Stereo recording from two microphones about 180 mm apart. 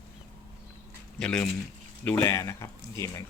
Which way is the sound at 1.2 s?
5° left (ahead or behind).